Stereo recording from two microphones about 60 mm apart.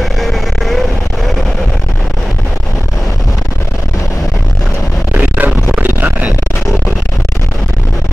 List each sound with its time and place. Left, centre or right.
0.2 s vehicle: centre
5.1 s music: right